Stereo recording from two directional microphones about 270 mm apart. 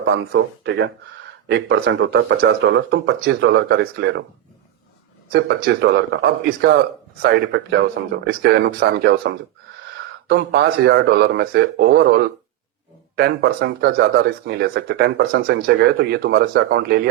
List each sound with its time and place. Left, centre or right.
0.0 s speech: right
5.3 s speech: right